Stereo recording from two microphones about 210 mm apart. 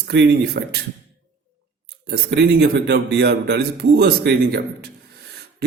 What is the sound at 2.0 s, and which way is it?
A man's voice, 50° right (ahead or behind).